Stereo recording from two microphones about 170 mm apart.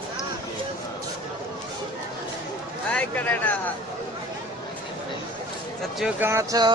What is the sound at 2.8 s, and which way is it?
Speech, 10° left (ahead or behind).